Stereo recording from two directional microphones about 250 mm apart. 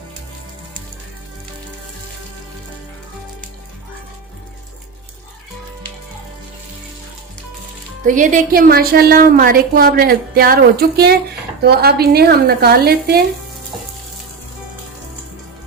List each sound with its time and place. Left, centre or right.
8.0 s a woman's voice: right